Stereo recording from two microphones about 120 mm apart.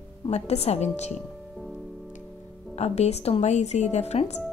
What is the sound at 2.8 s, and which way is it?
A woman's voice, 60° left (ahead or behind).